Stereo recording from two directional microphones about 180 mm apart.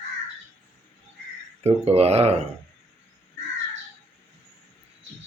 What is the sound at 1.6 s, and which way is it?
Speech, 35° right (ahead or behind).